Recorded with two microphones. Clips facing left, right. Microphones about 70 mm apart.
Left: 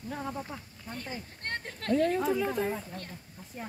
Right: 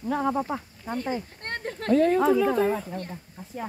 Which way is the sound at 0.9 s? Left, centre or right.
Right.